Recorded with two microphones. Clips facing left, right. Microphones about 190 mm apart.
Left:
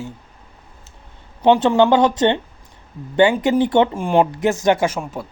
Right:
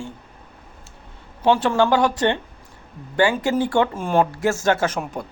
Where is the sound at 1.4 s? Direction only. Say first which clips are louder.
Left 4 dB; 20° left (ahead or behind).